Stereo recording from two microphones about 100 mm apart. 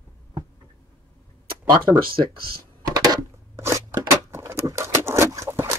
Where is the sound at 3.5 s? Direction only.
25° right (ahead or behind).